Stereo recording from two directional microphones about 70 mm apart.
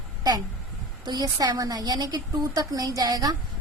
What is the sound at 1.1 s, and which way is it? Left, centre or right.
A woman's voice, right.